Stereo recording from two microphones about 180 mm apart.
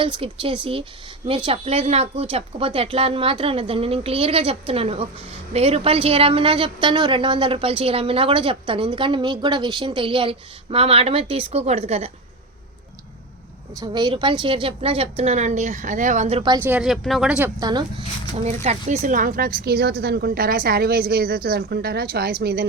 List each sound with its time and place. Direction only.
0.0 s a woman's voice: 30° right (ahead or behind)
13.7 s speech: 20° right (ahead or behind)
16.6 s speech: 5° right (ahead or behind)
17.6 s a woman's voice: 25° right (ahead or behind)
18.4 s speech: 40° right (ahead or behind); by 22.6 s 60° right (ahead or behind)